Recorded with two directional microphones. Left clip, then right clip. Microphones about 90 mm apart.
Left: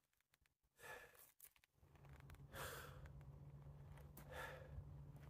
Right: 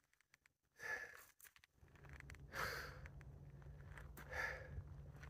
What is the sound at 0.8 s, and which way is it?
Wheeze, 25° left (ahead or behind).